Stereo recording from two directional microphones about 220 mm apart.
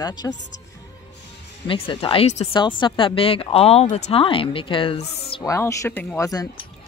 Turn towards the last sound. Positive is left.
turn(degrees=15)  # may be behind; listen again after turning